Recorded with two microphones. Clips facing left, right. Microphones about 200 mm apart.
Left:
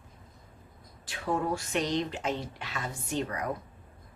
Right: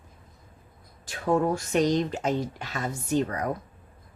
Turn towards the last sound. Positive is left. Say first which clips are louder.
# right 6 dB
turn(degrees=-45)  # may be behind; listen again after turning